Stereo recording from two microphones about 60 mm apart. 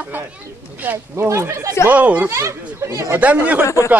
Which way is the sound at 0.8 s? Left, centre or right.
Right.